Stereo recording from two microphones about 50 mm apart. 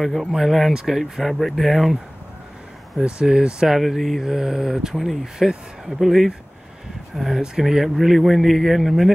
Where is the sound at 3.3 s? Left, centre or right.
Centre.